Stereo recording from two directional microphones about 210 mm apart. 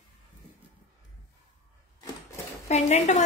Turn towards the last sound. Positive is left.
turn(degrees=35)  # may be behind; listen again after turning